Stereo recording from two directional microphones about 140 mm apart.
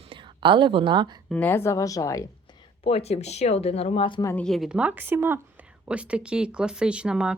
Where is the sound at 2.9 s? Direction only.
45° left (ahead or behind).